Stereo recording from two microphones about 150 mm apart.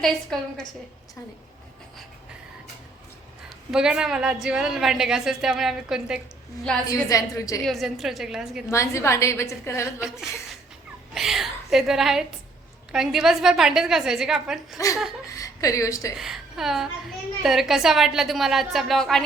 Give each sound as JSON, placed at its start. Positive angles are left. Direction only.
{"t": 0.0, "sound": "a woman's voice", "side_deg": 5}
{"t": 3.7, "sound": "a woman's voice", "side_deg": -5}
{"t": 6.8, "sound": "a woman's voice", "side_deg": 20}
{"t": 7.6, "sound": "a woman's voice", "side_deg": 0}
{"t": 8.7, "sound": "a woman's voice", "side_deg": 20}
{"t": 11.1, "sound": "a sound", "side_deg": 0}
{"t": 12.9, "sound": "a woman's voice", "side_deg": -5}
{"t": 15.3, "sound": "a woman's voice", "side_deg": 20}
{"t": 16.1, "sound": "a woman's voice", "side_deg": 0}